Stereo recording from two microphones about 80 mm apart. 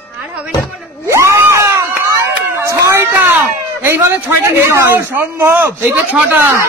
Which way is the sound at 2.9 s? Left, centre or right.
Right.